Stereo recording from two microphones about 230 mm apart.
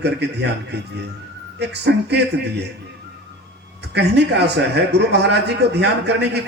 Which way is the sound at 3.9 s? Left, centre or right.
Right.